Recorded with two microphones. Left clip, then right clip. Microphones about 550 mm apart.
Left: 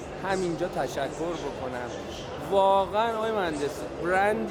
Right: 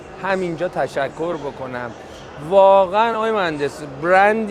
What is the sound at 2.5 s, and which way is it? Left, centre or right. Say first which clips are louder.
Speech: right 10 dB; right.